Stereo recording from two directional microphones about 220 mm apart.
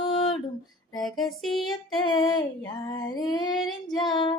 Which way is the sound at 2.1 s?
20° left (ahead or behind).